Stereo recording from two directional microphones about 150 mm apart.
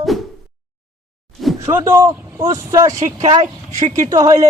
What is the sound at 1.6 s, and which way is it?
A man's voice, 20° right (ahead or behind).